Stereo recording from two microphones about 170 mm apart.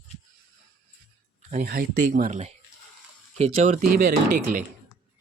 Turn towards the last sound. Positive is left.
turn(degrees=-55)  # may be behind; listen again after turning